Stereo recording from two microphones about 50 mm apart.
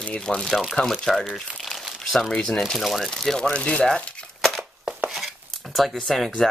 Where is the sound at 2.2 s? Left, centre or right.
Centre.